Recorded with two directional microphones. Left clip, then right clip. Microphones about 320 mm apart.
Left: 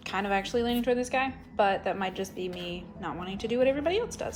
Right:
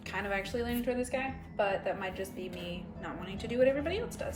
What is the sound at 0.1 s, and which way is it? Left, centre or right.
A woman's voice, centre.